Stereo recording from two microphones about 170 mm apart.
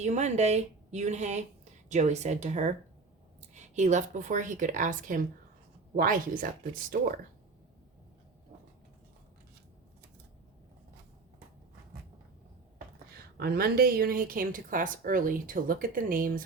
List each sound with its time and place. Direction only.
0.0 s speech: 45° right (ahead or behind)
13.3 s speech: 65° right (ahead or behind)